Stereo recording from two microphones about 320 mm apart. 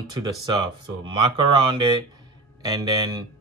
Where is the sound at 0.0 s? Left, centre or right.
Centre.